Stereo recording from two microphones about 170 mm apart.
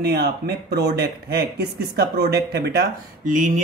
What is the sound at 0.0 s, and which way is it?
Speech, 70° right (ahead or behind).